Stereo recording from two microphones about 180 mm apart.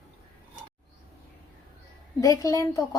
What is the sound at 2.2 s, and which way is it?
Speech, 20° left (ahead or behind).